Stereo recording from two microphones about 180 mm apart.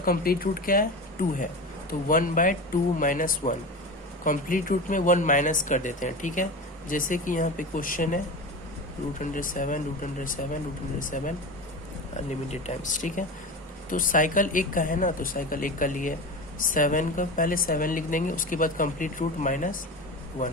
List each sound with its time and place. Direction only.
0.0 s speech: 55° left (ahead or behind)
1.9 s speech: 50° left (ahead or behind)
9.2 s speech: 50° left (ahead or behind)
12.5 s speech: 40° left (ahead or behind)